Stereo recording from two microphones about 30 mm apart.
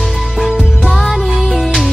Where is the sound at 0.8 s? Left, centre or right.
Centre.